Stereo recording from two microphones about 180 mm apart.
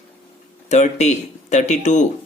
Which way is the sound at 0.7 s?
40° left (ahead or behind).